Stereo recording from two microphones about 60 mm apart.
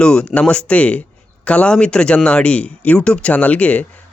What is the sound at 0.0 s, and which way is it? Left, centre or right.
Speech, centre.